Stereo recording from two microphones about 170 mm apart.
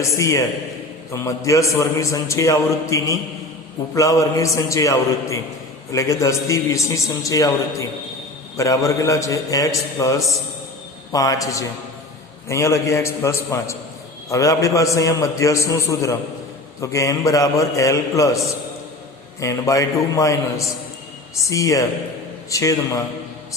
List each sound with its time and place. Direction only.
0.2 s a man's voice: 20° left (ahead or behind)
10.2 s a man's voice: centre (ahead or behind)
11.1 s a man's voice: 20° left (ahead or behind)